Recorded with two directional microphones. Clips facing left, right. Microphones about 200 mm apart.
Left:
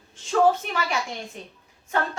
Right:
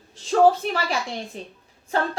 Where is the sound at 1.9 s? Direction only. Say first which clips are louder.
Right 2 dB; 30° right (ahead or behind).